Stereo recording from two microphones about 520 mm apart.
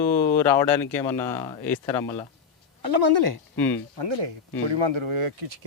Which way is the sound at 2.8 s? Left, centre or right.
Right.